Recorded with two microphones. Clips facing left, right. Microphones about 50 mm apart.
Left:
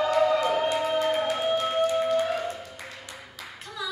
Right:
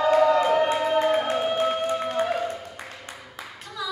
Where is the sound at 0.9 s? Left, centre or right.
Right.